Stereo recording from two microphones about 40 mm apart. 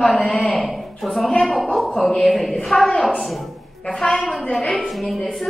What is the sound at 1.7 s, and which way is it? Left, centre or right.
Speech, centre.